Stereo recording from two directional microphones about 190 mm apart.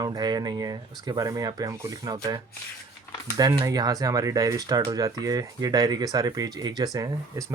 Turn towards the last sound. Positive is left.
turn(degrees=-20)  # may be behind; listen again after turning